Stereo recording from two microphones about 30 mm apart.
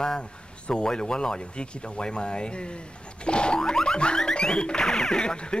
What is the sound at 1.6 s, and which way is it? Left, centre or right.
Music, left.